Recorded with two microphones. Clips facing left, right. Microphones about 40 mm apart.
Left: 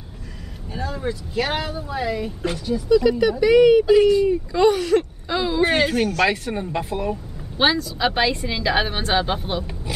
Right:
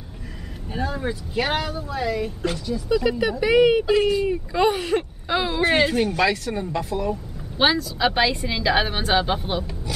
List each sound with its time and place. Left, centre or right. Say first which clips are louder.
0.7 s speech: even; centre
1.6 s a woman's voice: even; centre
2.9 s speech: left 5 dB; centre
5.6 s a woman's voice: left 1 dB; centre
6.2 s speech: left 1 dB; left
7.5 s a woman's voice: left 1 dB; centre